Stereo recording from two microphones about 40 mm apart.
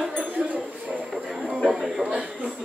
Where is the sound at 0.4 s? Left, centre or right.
Right.